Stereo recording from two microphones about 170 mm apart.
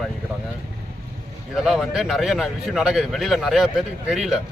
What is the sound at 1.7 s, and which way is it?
Speech, centre (ahead or behind).